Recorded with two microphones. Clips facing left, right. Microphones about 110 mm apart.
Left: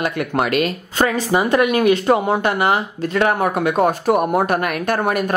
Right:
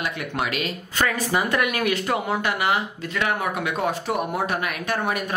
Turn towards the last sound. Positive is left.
turn(degrees=50)  # may be behind; listen again after turning